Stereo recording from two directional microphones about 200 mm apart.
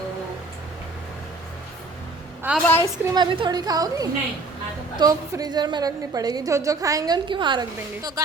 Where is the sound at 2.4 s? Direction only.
10° right (ahead or behind).